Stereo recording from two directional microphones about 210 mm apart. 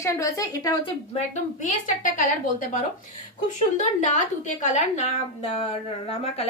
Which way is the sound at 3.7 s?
35° left (ahead or behind).